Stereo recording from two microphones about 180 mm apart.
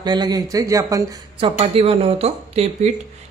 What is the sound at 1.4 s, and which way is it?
Speech, 30° right (ahead or behind).